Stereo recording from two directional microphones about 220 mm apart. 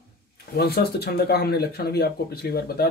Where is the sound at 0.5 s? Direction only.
45° left (ahead or behind).